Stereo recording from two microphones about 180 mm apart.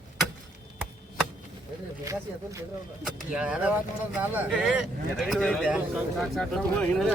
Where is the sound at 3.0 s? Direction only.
5° right (ahead or behind).